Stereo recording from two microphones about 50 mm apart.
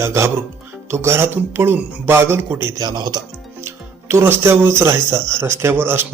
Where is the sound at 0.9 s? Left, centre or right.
Right.